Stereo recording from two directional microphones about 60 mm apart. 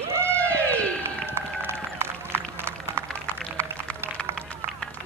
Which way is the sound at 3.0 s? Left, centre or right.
Left.